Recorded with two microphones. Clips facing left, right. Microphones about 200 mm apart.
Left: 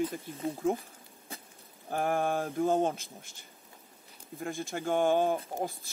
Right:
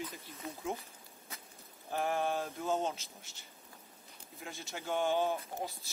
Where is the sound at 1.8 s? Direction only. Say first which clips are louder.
Left 4 dB; 50° left (ahead or behind).